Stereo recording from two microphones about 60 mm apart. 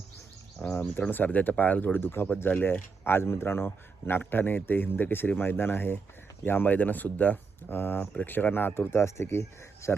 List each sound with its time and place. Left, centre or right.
0.6 s speech: left